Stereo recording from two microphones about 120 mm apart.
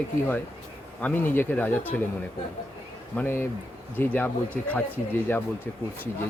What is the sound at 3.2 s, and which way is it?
Speech, 20° left (ahead or behind).